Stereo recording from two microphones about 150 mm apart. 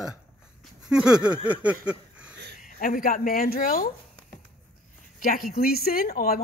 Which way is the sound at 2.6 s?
70° left (ahead or behind).